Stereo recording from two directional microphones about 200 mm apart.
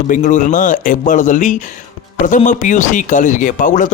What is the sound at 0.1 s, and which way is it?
A man's voice, 40° left (ahead or behind).